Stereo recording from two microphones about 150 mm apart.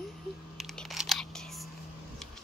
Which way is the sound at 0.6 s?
Centre (ahead or behind).